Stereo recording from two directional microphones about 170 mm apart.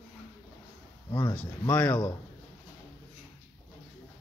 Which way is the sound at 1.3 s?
10° left (ahead or behind).